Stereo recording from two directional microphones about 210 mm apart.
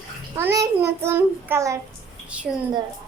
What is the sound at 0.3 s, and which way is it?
A child's voice, 15° right (ahead or behind).